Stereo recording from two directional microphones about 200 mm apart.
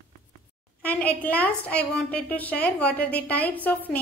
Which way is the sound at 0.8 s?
10° left (ahead or behind).